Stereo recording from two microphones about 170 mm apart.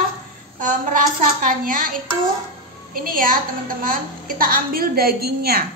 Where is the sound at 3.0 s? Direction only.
55° right (ahead or behind).